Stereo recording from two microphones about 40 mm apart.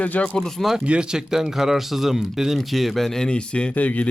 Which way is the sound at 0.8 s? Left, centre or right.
Right.